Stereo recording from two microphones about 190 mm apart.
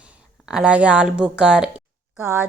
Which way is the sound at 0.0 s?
5° right (ahead or behind).